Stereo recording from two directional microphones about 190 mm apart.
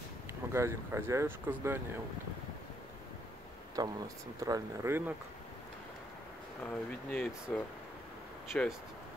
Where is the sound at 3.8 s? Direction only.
20° right (ahead or behind).